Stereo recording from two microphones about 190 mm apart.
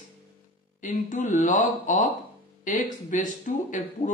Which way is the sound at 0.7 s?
40° left (ahead or behind).